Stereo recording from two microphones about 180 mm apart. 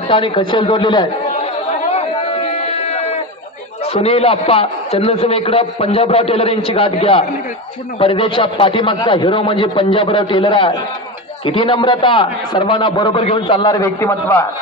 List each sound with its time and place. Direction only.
0.1 s chatter: 30° left (ahead or behind)
3.8 s a man's voice: 35° left (ahead or behind); by 14.4 s 15° left (ahead or behind)